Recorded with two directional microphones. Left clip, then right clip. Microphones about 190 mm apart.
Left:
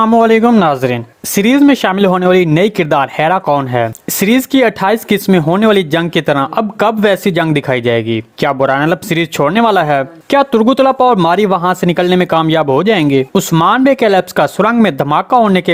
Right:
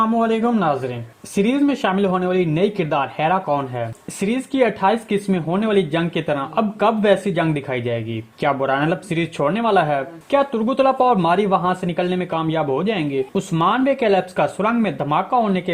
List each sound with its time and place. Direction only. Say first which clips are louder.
0.0 s speech: left 10 dB; 45° left (ahead or behind)